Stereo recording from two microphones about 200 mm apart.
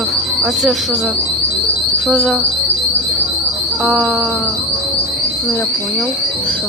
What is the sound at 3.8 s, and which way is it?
Speech, 5° left (ahead or behind).